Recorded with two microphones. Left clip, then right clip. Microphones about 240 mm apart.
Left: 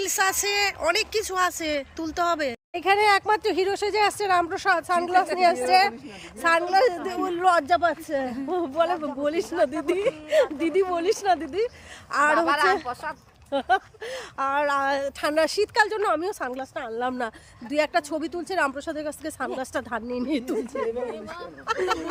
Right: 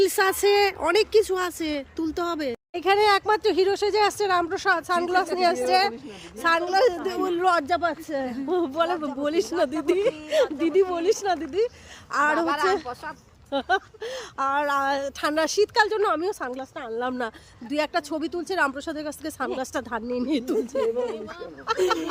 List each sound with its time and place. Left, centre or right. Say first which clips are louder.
0.0 s a woman's voice: right 3 dB; centre
13.5 s speech: left 1 dB; centre
21.8 s speech: right 2 dB; centre